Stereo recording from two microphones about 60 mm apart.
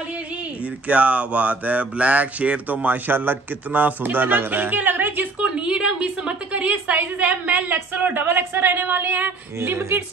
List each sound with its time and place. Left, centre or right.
0.8 s speech: right
5.4 s a sound: centre
6.5 s a woman's voice: right
9.6 s a woman's voice: right